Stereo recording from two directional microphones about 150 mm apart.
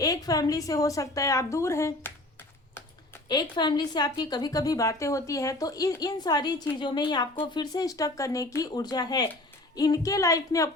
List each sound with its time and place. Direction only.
0.0 s a woman's voice: 25° left (ahead or behind)
3.5 s a woman's voice: 30° left (ahead or behind)